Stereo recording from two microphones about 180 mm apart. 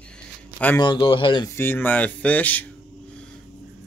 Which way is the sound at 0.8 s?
25° left (ahead or behind).